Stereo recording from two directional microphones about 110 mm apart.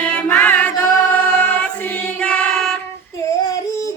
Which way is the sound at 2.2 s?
10° left (ahead or behind).